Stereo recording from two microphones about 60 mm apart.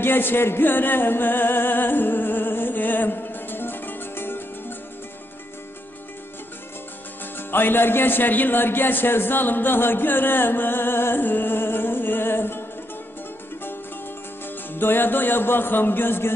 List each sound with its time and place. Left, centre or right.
0.0 s music: left
7.3 s speech: left
14.4 s speech: left